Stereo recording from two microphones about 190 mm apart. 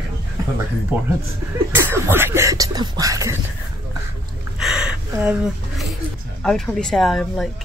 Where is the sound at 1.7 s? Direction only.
10° right (ahead or behind).